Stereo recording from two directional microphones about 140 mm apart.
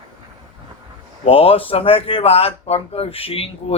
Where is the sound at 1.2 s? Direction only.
45° left (ahead or behind).